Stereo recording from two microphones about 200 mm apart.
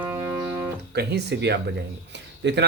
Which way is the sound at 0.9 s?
55° right (ahead or behind).